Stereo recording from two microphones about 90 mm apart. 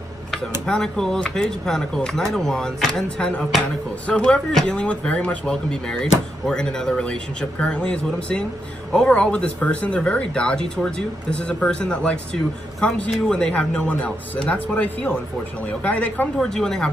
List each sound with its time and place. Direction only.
0.3 s speech: 5° left (ahead or behind)
16.3 s a woman's voice: 5° left (ahead or behind)